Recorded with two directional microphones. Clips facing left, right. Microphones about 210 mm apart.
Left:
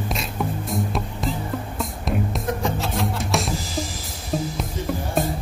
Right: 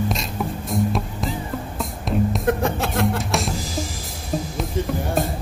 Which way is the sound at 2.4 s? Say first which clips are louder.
Right 4 dB; 60° right (ahead or behind).